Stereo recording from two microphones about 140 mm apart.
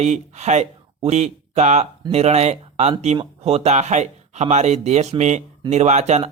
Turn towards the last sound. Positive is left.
turn(degrees=-55)  # may be behind; listen again after turning